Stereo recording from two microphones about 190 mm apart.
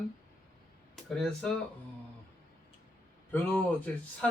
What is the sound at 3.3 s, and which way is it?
Speech, 5° left (ahead or behind).